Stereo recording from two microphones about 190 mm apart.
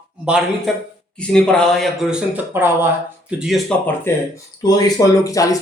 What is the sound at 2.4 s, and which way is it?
Speech, 10° right (ahead or behind).